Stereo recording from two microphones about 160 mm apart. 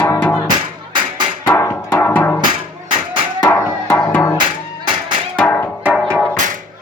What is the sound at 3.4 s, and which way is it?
Music, 10° left (ahead or behind).